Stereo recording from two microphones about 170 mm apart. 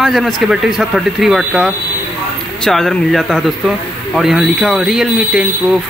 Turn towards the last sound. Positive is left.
turn(degrees=-5)  # may be behind; listen again after turning